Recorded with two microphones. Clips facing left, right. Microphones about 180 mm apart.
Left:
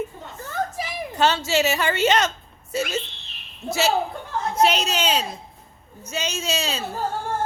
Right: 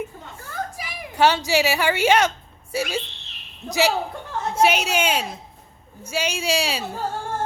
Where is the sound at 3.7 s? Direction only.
15° right (ahead or behind).